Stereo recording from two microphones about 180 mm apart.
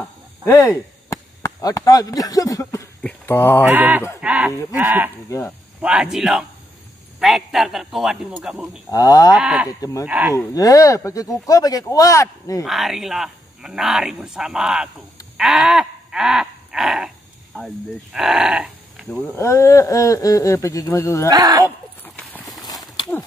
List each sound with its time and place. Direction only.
0.5 s speech: 20° left (ahead or behind)
3.6 s speech: 10° right (ahead or behind)
8.9 s speech: 20° left (ahead or behind)
9.3 s speech: 5° right (ahead or behind)
9.7 s speech: 20° left (ahead or behind)
10.0 s speech: 10° right (ahead or behind)
10.3 s speech: 20° left (ahead or behind)
12.6 s speech: centre (ahead or behind)
15.3 s a sound: centre (ahead or behind)
17.5 s speech: 10° left (ahead or behind)
18.1 s speech: 5° right (ahead or behind)
19.3 s speech: 15° left (ahead or behind)
21.3 s speech: 20° right (ahead or behind)
21.6 s clip-clop: 10° left (ahead or behind)